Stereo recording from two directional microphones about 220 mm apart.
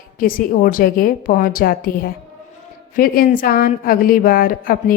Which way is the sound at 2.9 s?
40° left (ahead or behind).